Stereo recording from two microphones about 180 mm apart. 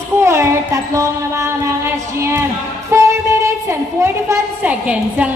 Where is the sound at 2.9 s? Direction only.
15° right (ahead or behind).